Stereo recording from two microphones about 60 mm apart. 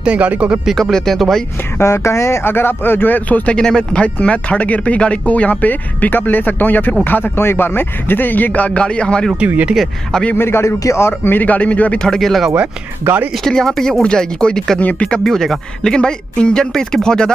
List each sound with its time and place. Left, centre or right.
0.0 s speech: right
0.7 s speech: centre
1.8 s speech: left
3.5 s speech: centre; by 7.3 s left
7.3 s speech: left; by 9.3 s centre
10.3 s speech: left
12.0 s speech: centre
13.0 s speech: right
13.4 s speech: centre
14.8 s speech: left
15.0 s speech: centre